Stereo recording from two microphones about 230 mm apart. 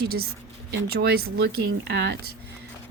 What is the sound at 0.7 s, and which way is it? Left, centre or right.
Speech, right.